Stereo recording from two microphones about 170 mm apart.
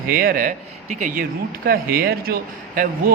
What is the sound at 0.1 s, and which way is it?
Speech, 60° right (ahead or behind).